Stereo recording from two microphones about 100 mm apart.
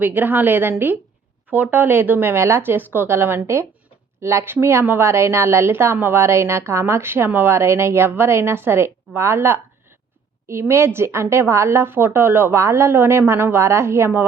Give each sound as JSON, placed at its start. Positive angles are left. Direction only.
{"t": 0.0, "sound": "a woman's voice", "side_deg": -20}